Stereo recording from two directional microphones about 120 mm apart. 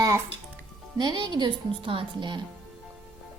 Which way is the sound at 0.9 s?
40° right (ahead or behind).